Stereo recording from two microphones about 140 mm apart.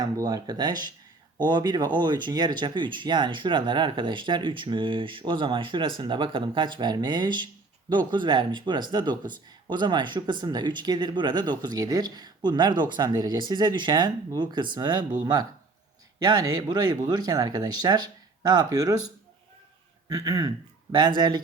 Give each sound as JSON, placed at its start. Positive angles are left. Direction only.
{"t": 0.0, "sound": "speech", "side_deg": -25}
{"t": 16.2, "sound": "speech", "side_deg": -30}
{"t": 20.1, "sound": "speech", "side_deg": -25}